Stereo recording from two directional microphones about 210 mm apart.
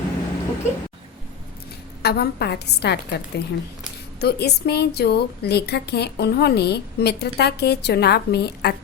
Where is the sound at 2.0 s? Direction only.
50° left (ahead or behind).